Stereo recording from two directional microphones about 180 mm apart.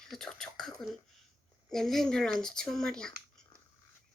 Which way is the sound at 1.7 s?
Centre (ahead or behind).